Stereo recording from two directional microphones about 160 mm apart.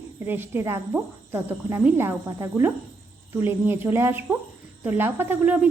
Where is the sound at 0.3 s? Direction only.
15° right (ahead or behind).